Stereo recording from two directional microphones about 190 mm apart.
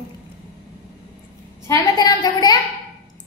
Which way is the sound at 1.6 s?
20° left (ahead or behind).